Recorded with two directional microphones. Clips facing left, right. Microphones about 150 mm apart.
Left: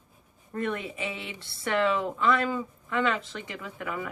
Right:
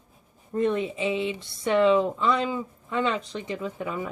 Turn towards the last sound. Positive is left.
turn(degrees=-20)  # may be behind; listen again after turning